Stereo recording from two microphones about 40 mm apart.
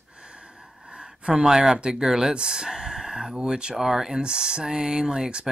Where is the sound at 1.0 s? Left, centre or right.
Centre.